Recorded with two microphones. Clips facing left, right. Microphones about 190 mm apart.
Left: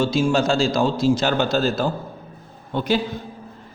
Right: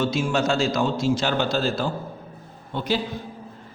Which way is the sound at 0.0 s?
30° left (ahead or behind).